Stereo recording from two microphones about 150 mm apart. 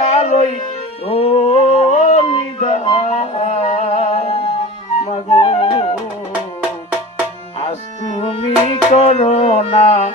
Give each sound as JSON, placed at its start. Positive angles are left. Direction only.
{"t": 0.1, "sound": "music", "side_deg": 50}
{"t": 1.0, "sound": "a sound", "side_deg": 40}
{"t": 5.0, "sound": "flute", "side_deg": 50}
{"t": 7.6, "sound": "music", "side_deg": 45}